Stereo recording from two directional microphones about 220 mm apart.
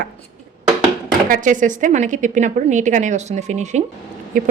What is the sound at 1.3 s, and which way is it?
A woman's voice, 35° right (ahead or behind).